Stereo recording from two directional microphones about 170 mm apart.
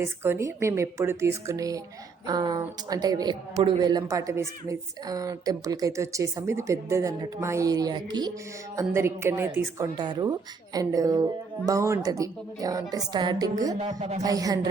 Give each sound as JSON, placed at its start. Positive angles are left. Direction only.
{"t": 0.0, "sound": "a woman's voice", "side_deg": -15}